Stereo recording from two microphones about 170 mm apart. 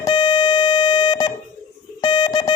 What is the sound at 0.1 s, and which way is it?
Music, 25° left (ahead or behind).